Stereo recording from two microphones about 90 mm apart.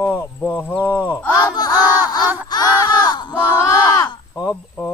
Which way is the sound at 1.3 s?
45° left (ahead or behind).